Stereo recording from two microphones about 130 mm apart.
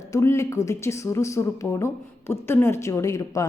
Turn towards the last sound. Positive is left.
turn(degrees=25)  # may be behind; listen again after turning